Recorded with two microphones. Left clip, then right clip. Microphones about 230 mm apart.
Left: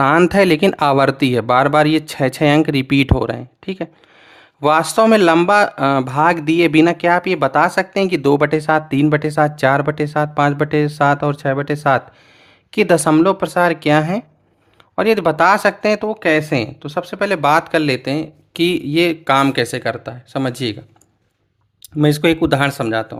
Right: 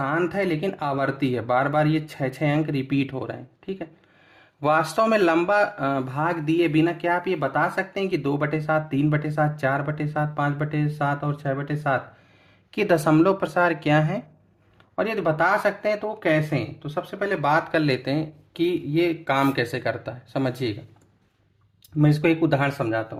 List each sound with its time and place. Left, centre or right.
0.0 s speech: left
4.6 s speech: left
12.7 s speech: left
14.9 s speech: left
21.9 s speech: left